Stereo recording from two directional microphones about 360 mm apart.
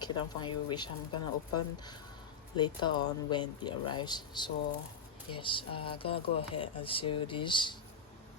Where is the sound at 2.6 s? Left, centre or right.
Centre.